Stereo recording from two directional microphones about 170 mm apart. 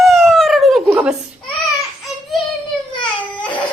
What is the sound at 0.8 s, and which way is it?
Speech, 10° right (ahead or behind).